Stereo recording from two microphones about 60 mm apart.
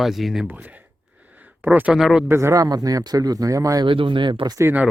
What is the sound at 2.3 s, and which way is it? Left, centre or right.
Speech, right.